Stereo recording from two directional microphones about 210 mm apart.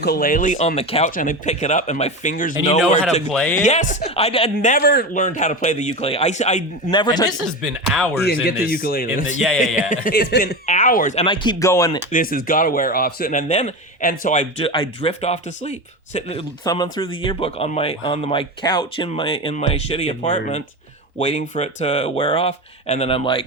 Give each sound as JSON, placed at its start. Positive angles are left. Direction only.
{"t": 0.0, "sound": "speech", "side_deg": 45}
{"t": 3.6, "sound": "speech", "side_deg": 35}
{"t": 4.5, "sound": "speech", "side_deg": 40}
{"t": 6.9, "sound": "speech", "side_deg": 20}
{"t": 7.3, "sound": "speech", "side_deg": 0}
{"t": 8.2, "sound": "speech", "side_deg": 50}
{"t": 10.7, "sound": "speech", "side_deg": 40}
{"t": 12.1, "sound": "speech", "side_deg": 45}
{"t": 16.6, "sound": "speech", "side_deg": 20}